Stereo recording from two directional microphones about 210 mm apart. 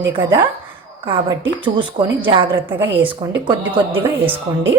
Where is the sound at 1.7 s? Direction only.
25° right (ahead or behind).